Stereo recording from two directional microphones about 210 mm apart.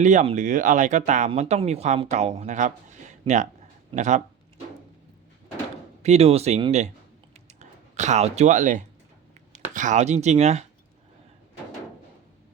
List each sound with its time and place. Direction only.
0.0 s speech: 35° right (ahead or behind)
6.0 s speech: 30° right (ahead or behind)
7.3 s typing: 30° right (ahead or behind)
9.5 s speech: 35° right (ahead or behind)